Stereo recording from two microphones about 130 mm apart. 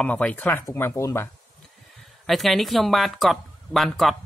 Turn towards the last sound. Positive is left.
turn(degrees=0)  # may be behind; listen again after turning